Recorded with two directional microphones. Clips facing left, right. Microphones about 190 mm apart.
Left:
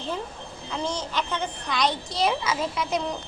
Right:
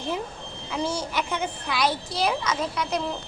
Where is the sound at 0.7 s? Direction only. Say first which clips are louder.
Right 2 dB; 10° right (ahead or behind).